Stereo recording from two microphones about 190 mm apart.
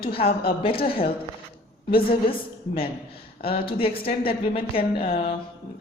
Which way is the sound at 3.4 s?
30° left (ahead or behind).